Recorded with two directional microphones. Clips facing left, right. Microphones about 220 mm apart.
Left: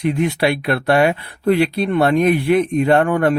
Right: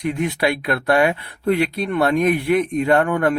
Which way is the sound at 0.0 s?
30° left (ahead or behind).